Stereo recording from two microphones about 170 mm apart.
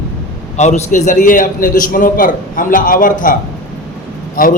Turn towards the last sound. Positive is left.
turn(degrees=55)  # may be behind; listen again after turning